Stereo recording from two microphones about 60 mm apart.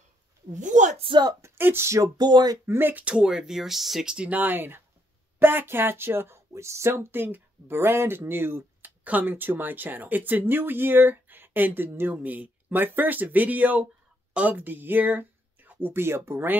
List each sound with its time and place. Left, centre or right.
1.4 s speech: right
1.9 s speech: right
2.6 s speech: right
3.1 s speech: centre
4.3 s speech: right
9.0 s speech: right